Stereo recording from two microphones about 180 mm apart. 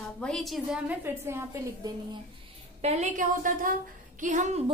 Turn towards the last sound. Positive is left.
turn(degrees=-45)  # may be behind; listen again after turning